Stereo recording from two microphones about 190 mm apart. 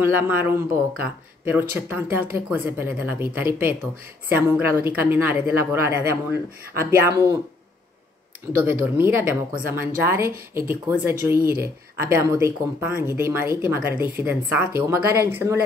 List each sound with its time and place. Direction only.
0.0 s speech: 10° right (ahead or behind)
8.5 s speech: 10° right (ahead or behind)
11.3 s speech: 50° right (ahead or behind)
11.6 s speech: 15° right (ahead or behind)